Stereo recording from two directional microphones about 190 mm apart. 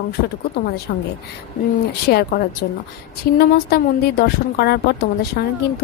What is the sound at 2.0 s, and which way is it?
A woman's voice, 55° left (ahead or behind).